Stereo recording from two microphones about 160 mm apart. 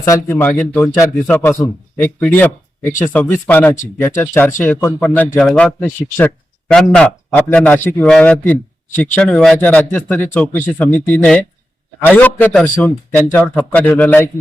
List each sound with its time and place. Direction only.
0.0 s a man's voice: 15° left (ahead or behind)